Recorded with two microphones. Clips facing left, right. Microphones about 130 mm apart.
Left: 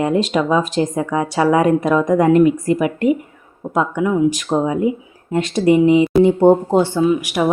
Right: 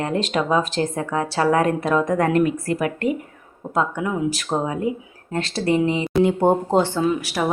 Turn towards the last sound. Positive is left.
turn(degrees=15)  # may be behind; listen again after turning